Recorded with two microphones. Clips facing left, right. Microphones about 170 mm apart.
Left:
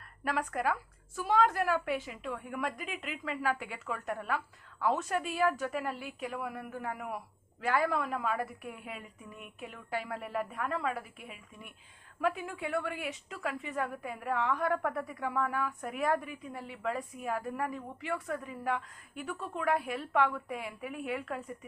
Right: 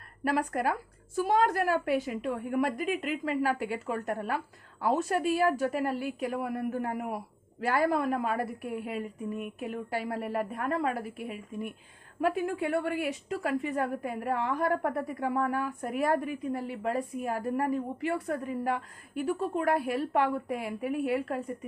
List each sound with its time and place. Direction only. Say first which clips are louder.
0.3 s a woman's voice: right 4 dB; 40° right (ahead or behind)